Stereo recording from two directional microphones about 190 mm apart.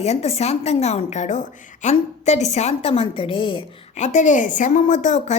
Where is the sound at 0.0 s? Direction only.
35° left (ahead or behind).